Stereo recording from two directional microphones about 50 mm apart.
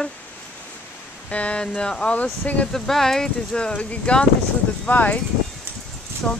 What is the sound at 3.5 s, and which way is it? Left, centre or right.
Speech, left.